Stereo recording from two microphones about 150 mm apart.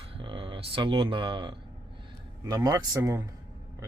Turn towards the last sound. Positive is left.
turn(degrees=-25)  # may be behind; listen again after turning